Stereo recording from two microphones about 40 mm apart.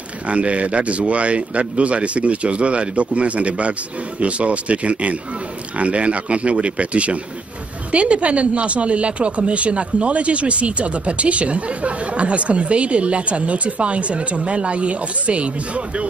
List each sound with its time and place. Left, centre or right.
0.3 s speech: right